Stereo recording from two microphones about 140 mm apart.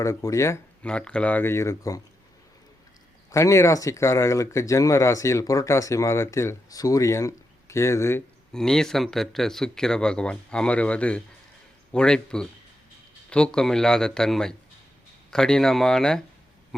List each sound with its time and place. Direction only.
0.0 s speech: 20° left (ahead or behind)
0.8 s speech: 5° left (ahead or behind)
3.3 s speech: 20° left (ahead or behind)
8.5 s speech: 5° left (ahead or behind)